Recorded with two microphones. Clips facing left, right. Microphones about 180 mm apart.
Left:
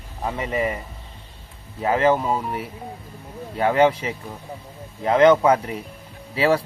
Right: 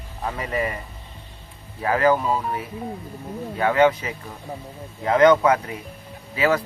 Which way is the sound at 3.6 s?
30° left (ahead or behind).